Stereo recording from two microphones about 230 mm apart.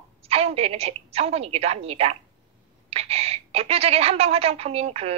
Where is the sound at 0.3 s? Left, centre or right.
Right.